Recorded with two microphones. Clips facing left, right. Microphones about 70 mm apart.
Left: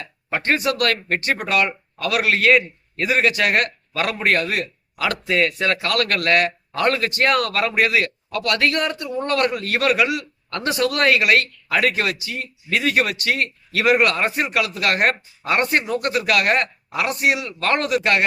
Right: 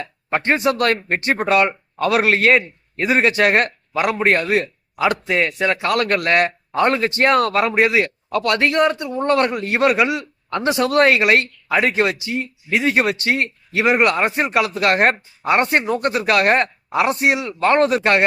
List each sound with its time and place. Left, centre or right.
0.3 s speech: centre
0.5 s speech: right